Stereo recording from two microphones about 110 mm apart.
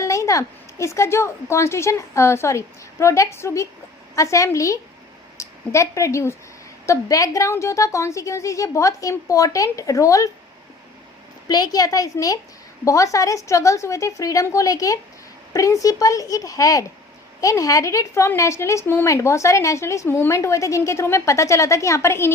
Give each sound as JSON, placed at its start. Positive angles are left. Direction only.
{"t": 0.0, "sound": "a woman's voice", "side_deg": 30}
{"t": 11.4, "sound": "a woman's voice", "side_deg": 35}